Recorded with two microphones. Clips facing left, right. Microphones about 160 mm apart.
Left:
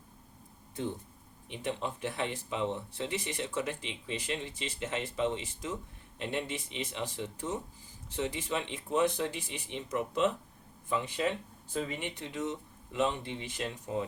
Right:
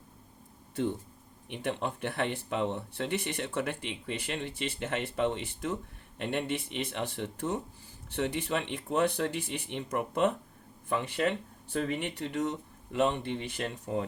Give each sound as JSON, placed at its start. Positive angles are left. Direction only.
{"t": 1.5, "sound": "speech", "side_deg": -60}